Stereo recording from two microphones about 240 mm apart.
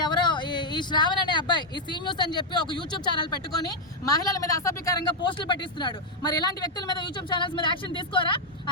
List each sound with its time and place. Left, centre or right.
0.0 s speech: centre